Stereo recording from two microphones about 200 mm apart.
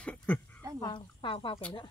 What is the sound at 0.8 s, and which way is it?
Speech, 25° left (ahead or behind).